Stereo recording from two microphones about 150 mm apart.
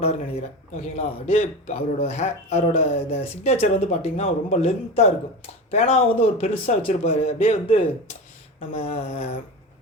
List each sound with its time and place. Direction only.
0.7 s a man's voice: 45° left (ahead or behind)